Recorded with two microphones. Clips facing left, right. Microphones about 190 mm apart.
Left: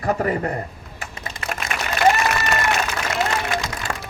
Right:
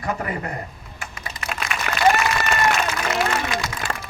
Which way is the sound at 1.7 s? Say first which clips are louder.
Left 2 dB; 40° left (ahead or behind).